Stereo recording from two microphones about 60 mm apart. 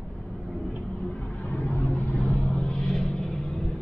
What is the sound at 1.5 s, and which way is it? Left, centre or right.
Vehicle, left.